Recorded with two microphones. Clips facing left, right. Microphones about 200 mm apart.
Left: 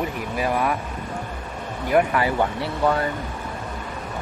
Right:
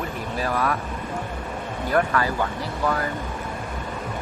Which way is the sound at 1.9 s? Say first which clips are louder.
Left 3 dB; 15° left (ahead or behind).